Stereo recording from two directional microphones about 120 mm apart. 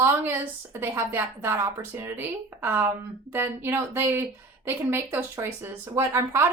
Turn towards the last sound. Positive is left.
turn(degrees=-20)  # may be behind; listen again after turning